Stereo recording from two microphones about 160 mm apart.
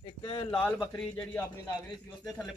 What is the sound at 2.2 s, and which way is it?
Speech, centre (ahead or behind).